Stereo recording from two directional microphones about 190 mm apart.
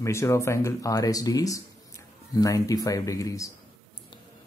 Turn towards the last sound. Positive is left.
turn(degrees=15)  # may be behind; listen again after turning